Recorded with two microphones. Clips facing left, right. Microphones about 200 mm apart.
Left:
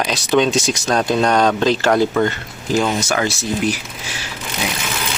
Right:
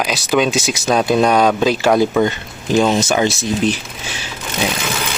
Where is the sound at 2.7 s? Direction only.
25° right (ahead or behind).